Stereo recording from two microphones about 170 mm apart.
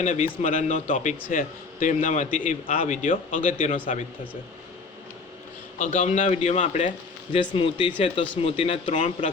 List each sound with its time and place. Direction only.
0.0 s a man's voice: 45° left (ahead or behind)
5.8 s a man's voice: 50° left (ahead or behind)
7.5 s a man's voice: 30° left (ahead or behind)